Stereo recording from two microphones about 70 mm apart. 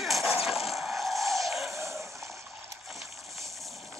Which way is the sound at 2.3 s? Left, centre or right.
Right.